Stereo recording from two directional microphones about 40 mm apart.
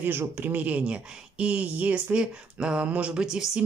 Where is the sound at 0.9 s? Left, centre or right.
Right.